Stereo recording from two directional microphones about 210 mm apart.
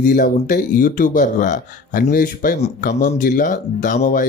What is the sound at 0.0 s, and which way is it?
Speech, 40° left (ahead or behind).